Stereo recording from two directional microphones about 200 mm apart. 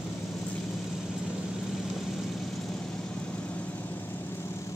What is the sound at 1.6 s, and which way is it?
Vehicle, centre (ahead or behind).